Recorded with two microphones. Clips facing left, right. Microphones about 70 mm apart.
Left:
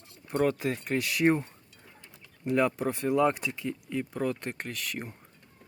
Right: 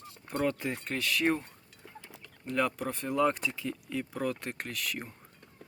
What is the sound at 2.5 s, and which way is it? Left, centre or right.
Speech, centre.